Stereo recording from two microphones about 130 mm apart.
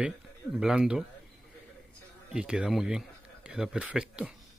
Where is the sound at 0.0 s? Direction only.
5° right (ahead or behind).